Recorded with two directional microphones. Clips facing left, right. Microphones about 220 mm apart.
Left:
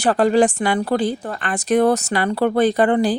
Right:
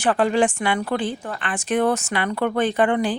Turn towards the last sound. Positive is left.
turn(degrees=35)  # may be behind; listen again after turning